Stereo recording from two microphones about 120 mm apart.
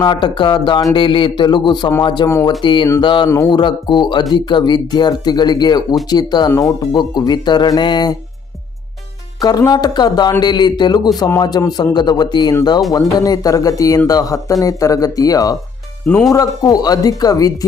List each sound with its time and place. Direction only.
0.0 s speech: 40° left (ahead or behind)
2.2 s speech: 25° left (ahead or behind)
2.6 s speech: 40° left (ahead or behind)
3.0 s a sound: 45° left (ahead or behind)
3.2 s speech: 25° left (ahead or behind)
3.5 s speech: 40° left (ahead or behind)
9.4 s speech: 30° left (ahead or behind)